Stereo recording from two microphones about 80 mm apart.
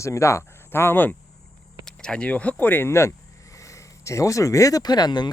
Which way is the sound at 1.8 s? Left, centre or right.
Centre.